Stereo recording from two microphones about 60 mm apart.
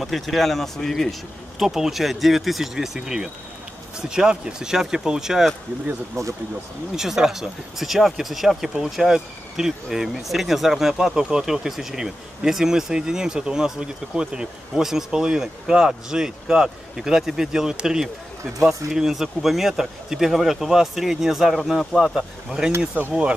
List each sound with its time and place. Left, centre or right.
0.0 s speech: centre
1.6 s speech: centre
6.2 s speech: right
7.0 s speech: centre
23.0 s speech: right